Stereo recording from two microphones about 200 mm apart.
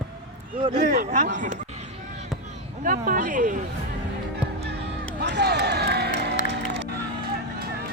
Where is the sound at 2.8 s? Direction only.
45° right (ahead or behind).